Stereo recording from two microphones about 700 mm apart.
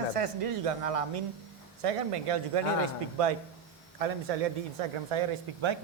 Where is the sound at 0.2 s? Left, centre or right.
Right.